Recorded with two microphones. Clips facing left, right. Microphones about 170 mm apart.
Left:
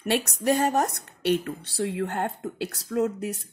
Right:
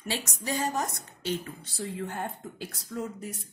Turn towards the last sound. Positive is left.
turn(degrees=75)  # may be behind; listen again after turning